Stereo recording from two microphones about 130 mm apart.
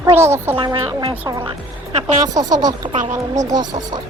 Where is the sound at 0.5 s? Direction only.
40° right (ahead or behind).